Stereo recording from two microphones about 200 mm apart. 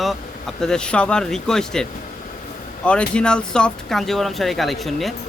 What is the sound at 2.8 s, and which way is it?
Speech, 5° left (ahead or behind).